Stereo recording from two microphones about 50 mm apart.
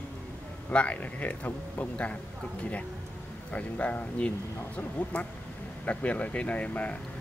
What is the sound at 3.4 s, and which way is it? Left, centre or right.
Speech, left.